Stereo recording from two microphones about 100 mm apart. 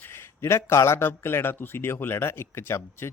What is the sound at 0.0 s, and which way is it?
A man's voice, 25° left (ahead or behind).